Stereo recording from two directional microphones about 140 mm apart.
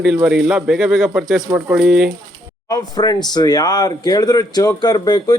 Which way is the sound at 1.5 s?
15° right (ahead or behind).